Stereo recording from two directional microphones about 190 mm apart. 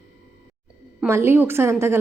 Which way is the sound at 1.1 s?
10° right (ahead or behind).